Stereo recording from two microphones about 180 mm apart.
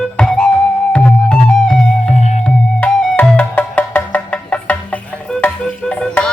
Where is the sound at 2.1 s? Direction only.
40° left (ahead or behind).